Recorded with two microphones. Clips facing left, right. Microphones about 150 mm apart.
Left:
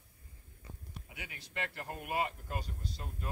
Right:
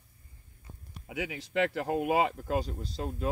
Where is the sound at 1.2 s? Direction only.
90° right.